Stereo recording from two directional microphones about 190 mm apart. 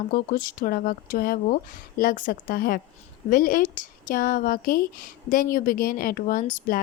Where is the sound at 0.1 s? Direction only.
50° left (ahead or behind).